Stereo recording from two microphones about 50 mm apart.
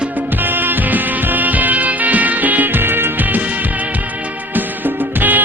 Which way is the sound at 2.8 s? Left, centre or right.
Right.